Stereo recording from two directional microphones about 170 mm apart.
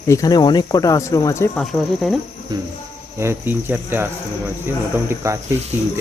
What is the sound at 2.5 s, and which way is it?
Cricket, 20° right (ahead or behind).